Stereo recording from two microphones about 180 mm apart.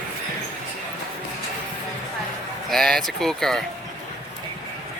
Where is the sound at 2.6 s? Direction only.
Centre (ahead or behind).